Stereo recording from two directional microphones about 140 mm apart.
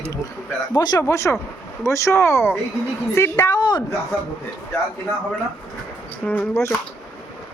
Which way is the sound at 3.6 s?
35° left (ahead or behind).